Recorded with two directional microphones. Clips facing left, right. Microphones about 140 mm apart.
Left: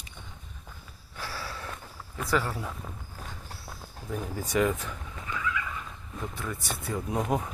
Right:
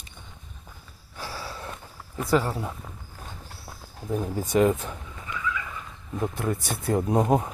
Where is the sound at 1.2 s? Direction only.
20° right (ahead or behind).